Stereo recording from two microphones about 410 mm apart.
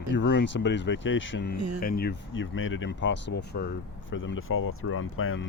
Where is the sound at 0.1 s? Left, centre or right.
Left.